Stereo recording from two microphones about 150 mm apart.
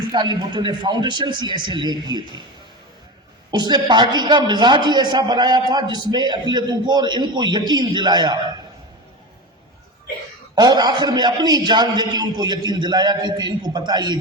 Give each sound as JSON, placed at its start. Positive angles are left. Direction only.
{"t": 0.1, "sound": "a woman's voice", "side_deg": -30}
{"t": 3.5, "sound": "a woman's voice", "side_deg": -30}
{"t": 10.5, "sound": "a woman's voice", "side_deg": -30}